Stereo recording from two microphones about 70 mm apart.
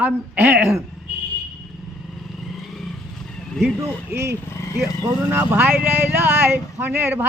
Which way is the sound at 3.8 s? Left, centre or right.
Right.